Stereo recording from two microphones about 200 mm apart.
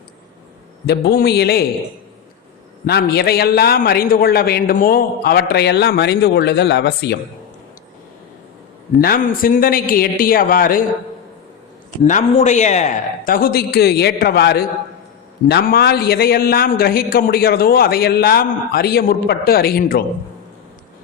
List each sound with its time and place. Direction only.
0.9 s a man's voice: 55° left (ahead or behind)
2.8 s a man's voice: 55° left (ahead or behind)
9.0 s a man's voice: 45° left (ahead or behind)
12.0 s a man's voice: 35° left (ahead or behind)